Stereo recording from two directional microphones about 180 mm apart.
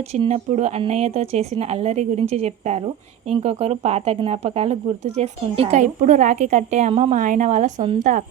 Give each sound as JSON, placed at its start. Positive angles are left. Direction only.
{"t": 0.2, "sound": "speech", "side_deg": -35}